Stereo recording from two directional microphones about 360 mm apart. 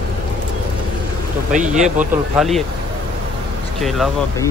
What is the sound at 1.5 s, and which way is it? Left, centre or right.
Speech, right.